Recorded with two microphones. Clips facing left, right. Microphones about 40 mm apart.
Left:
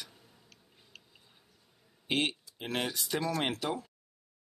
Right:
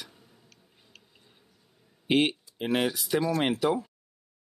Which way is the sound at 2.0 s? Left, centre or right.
Centre.